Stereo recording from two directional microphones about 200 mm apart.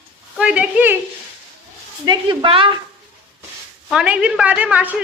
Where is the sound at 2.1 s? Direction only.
25° right (ahead or behind).